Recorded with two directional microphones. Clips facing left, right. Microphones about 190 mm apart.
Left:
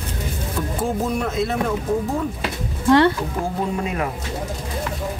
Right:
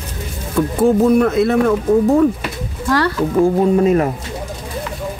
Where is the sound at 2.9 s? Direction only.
25° left (ahead or behind).